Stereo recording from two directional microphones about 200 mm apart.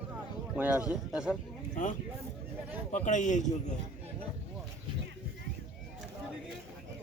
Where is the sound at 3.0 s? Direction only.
40° left (ahead or behind).